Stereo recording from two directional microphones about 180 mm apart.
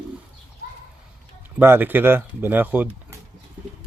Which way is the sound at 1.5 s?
10° right (ahead or behind).